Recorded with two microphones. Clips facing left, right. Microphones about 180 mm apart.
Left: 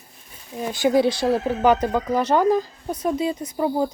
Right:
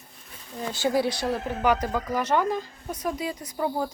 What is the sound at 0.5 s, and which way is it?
Speech, 15° left (ahead or behind).